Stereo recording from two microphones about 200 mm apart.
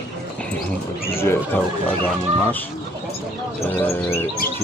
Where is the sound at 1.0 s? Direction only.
10° left (ahead or behind).